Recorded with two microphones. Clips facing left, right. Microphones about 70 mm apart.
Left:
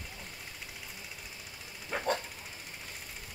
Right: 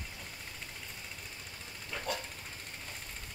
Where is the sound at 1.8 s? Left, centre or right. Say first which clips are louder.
Left 6 dB; left.